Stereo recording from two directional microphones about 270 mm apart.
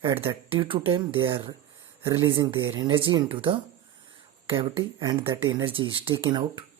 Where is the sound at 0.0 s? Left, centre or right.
Centre.